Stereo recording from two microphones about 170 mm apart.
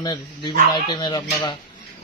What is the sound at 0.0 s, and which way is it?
Speech, 25° left (ahead or behind).